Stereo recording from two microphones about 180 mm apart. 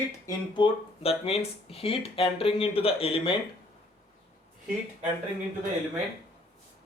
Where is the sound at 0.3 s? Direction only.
25° left (ahead or behind).